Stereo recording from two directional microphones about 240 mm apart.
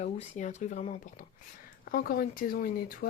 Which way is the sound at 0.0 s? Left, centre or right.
Left.